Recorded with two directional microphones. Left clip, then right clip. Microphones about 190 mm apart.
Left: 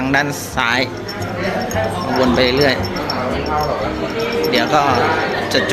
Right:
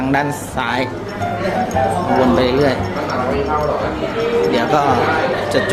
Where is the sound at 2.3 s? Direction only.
5° right (ahead or behind).